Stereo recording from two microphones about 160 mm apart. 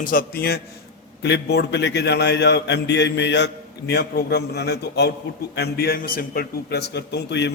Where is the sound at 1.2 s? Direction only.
90° left.